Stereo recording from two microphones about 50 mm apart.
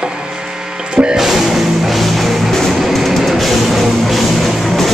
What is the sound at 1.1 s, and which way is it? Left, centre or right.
Music, centre.